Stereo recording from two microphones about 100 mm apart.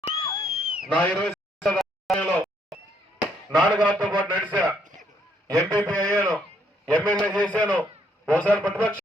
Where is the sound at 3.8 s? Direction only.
15° left (ahead or behind).